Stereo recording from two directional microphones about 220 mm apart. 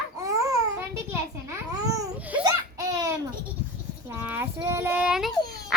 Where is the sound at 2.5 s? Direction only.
15° right (ahead or behind).